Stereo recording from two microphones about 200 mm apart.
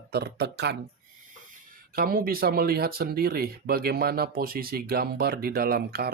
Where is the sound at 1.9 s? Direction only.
45° right (ahead or behind).